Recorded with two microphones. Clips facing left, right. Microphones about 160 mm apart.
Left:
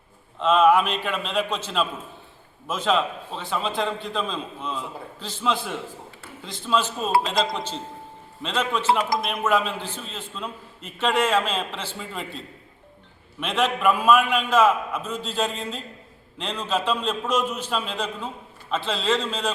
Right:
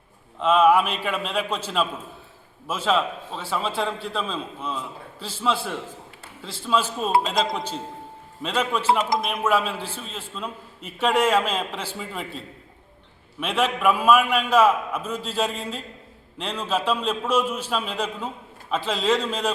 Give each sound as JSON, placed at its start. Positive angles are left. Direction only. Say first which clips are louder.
{"t": 0.3, "sound": "a man's voice", "louder": "even", "side_deg": -10}
{"t": 13.4, "sound": "a man's voice", "louder": "even", "side_deg": -5}